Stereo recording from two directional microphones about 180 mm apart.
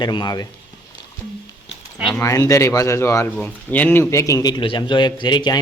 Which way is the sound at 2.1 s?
15° left (ahead or behind).